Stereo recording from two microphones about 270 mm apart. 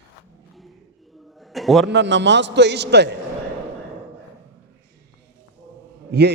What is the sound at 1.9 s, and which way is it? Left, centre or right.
A man's voice, right.